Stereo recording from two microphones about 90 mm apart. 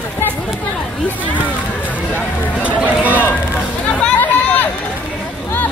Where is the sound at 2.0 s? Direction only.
20° left (ahead or behind).